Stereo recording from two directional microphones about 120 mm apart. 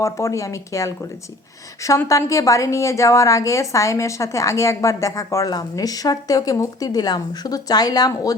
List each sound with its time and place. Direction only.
0.0 s a woman's voice: 25° left (ahead or behind)